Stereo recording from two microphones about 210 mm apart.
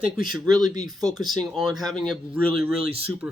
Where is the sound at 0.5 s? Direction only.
20° right (ahead or behind).